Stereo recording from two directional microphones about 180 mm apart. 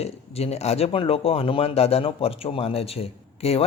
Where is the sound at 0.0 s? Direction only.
35° left (ahead or behind).